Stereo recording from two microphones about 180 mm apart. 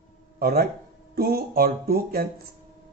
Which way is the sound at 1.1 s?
60° right (ahead or behind).